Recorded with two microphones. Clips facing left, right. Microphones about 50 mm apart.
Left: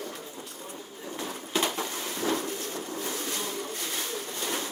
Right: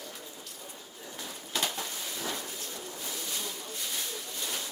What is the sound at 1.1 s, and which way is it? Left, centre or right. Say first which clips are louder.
Bird: left 7 dB; left.